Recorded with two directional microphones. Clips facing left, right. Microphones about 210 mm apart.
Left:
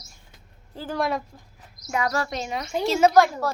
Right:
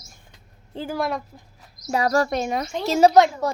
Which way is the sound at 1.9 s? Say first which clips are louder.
Right 5 dB; 35° right (ahead or behind).